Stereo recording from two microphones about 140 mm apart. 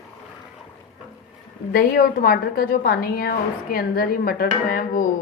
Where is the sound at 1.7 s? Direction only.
90° left.